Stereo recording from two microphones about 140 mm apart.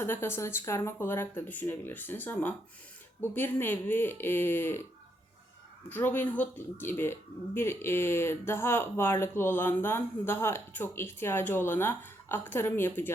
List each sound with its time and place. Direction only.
0.0 s speech: 15° left (ahead or behind)
5.9 s speech: 15° left (ahead or behind)